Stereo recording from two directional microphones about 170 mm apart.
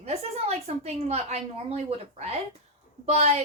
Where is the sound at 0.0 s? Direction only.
40° right (ahead or behind).